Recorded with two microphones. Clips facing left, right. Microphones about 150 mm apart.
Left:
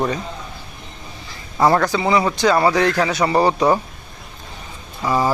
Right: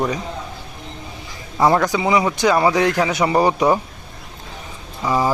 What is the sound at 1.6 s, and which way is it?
Speech, 15° right (ahead or behind).